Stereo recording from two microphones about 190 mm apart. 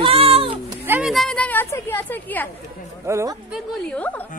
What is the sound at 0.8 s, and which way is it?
Speech, 10° right (ahead or behind).